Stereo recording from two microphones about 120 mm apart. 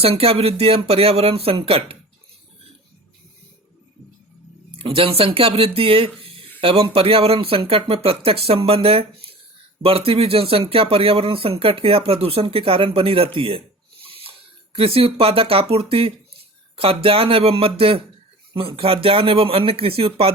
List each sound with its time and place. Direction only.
0.0 s speech: 55° right (ahead or behind)
4.8 s speech: 50° right (ahead or behind)